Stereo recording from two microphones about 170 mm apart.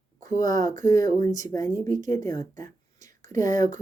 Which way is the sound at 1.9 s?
45° right (ahead or behind).